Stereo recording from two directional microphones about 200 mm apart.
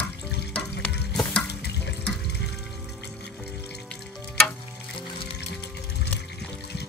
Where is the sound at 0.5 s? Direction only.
5° left (ahead or behind).